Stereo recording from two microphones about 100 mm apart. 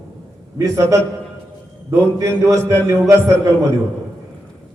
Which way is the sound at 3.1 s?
30° right (ahead or behind).